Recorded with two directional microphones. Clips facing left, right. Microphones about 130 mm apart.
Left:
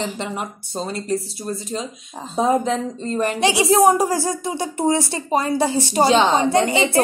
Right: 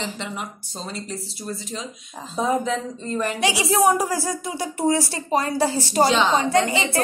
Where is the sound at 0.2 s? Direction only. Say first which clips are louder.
Left 4 dB; 50° left (ahead or behind).